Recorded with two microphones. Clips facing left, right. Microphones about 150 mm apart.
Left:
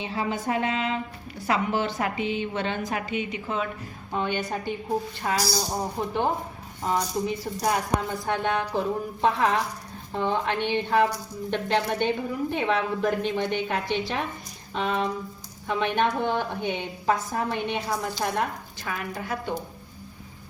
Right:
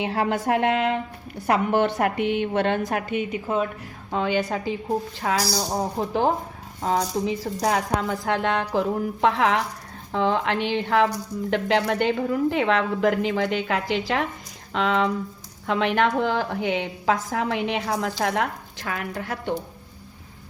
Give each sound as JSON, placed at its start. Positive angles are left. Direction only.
{"t": 0.0, "sound": "a woman's voice", "side_deg": -65}
{"t": 4.1, "sound": "a woman's voice", "side_deg": -90}
{"t": 6.8, "sound": "a woman's voice", "side_deg": -90}
{"t": 9.2, "sound": "a woman's voice", "side_deg": -75}
{"t": 10.1, "sound": "a woman's voice", "side_deg": -85}